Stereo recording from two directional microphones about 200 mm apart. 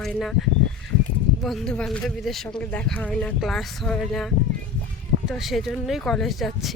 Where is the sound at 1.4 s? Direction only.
Centre (ahead or behind).